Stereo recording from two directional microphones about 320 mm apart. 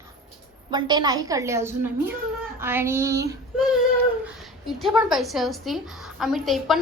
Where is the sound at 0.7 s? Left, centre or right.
Centre.